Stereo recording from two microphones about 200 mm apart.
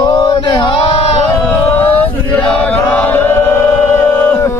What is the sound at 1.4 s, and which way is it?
Chant, 10° left (ahead or behind).